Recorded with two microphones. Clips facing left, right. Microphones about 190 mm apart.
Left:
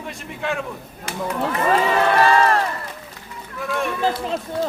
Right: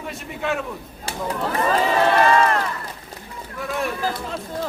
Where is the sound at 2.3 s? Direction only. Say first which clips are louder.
Left 1 dB; 35° left (ahead or behind).